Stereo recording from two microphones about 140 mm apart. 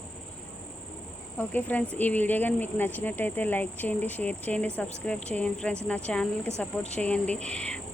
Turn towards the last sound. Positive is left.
turn(degrees=5)  # may be behind; listen again after turning